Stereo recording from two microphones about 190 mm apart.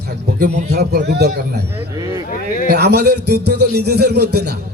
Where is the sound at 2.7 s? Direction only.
60° right (ahead or behind).